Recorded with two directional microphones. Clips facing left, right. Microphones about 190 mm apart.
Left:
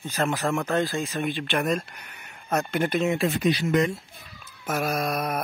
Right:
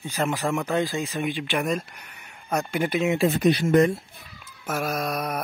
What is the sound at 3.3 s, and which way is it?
Speech, 50° right (ahead or behind).